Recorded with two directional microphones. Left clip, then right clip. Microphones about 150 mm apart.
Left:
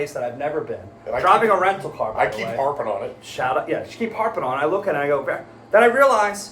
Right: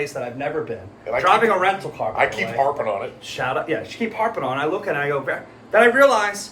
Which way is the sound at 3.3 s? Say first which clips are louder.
Left 1 dB; 25° left (ahead or behind).